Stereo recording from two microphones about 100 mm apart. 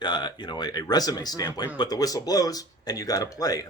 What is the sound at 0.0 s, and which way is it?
Speech, 50° left (ahead or behind).